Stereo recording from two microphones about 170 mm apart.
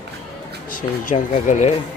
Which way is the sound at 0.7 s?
55° left (ahead or behind).